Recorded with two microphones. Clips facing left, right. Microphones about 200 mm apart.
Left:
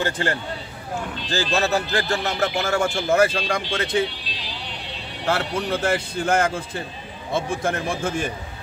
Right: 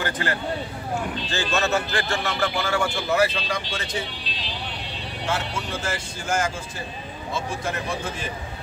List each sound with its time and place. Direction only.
0.0 s speech: 30° left (ahead or behind); by 3.9 s 50° left (ahead or behind)
5.2 s speech: 60° left (ahead or behind)